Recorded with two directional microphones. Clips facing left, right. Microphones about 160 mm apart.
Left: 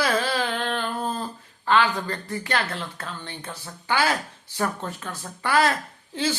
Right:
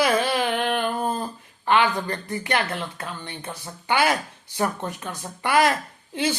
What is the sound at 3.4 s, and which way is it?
Speech, 15° right (ahead or behind).